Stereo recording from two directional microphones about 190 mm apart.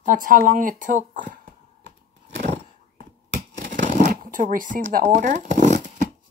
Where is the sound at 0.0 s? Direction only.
45° right (ahead or behind).